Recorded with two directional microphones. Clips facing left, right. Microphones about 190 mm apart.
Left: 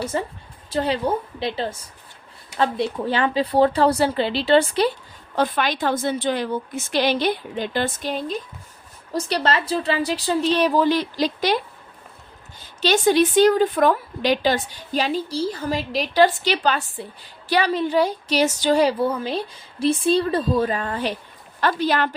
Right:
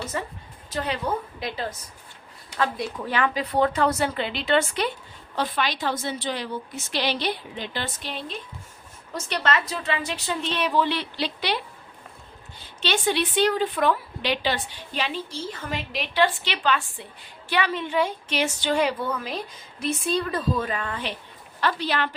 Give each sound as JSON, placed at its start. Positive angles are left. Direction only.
{"t": 0.0, "sound": "a woman's voice", "side_deg": 30}
{"t": 5.4, "sound": "a woman's voice", "side_deg": 50}
{"t": 9.1, "sound": "a woman's voice", "side_deg": 35}